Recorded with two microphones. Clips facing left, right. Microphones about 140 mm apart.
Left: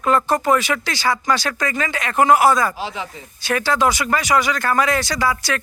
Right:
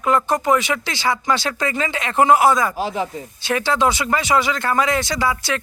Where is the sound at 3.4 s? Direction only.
25° right (ahead or behind).